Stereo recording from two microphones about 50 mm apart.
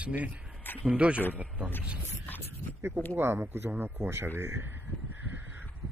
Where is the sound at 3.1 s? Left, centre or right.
Right.